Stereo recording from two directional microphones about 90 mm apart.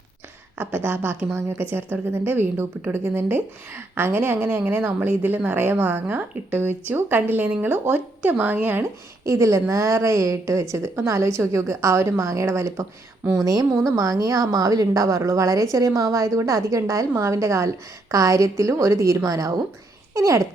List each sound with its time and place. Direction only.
0.6 s a woman's voice: 25° right (ahead or behind)
9.2 s speech: 35° right (ahead or behind)